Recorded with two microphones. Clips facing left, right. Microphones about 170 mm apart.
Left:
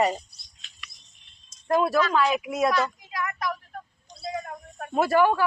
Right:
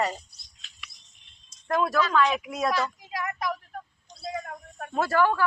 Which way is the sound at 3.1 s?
30° right (ahead or behind).